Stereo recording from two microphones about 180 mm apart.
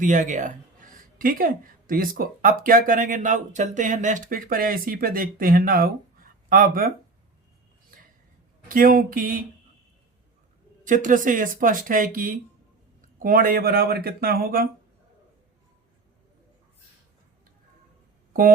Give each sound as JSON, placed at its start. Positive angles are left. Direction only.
{"t": 0.0, "sound": "a woman's voice", "side_deg": -45}
{"t": 8.7, "sound": "a woman's voice", "side_deg": -50}
{"t": 10.8, "sound": "a woman's voice", "side_deg": -45}